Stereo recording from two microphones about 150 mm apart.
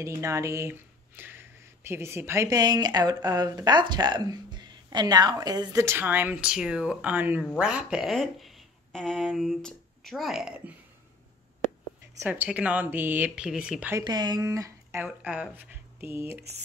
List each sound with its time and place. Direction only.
0.0 s speech: 20° right (ahead or behind); by 10.6 s 5° right (ahead or behind)
12.2 s speech: 10° right (ahead or behind)
13.9 s speech: 25° right (ahead or behind)
15.0 s speech: 5° right (ahead or behind)